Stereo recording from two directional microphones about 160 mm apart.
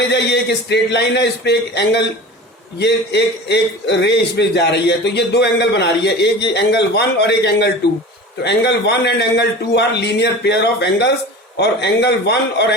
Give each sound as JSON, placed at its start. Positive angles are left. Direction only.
{"t": 0.1, "sound": "a man's voice", "side_deg": 90}